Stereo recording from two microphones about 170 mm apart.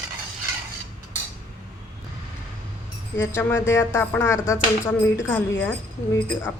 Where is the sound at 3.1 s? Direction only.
15° left (ahead or behind).